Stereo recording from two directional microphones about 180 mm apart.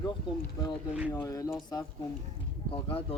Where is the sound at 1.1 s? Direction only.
20° left (ahead or behind).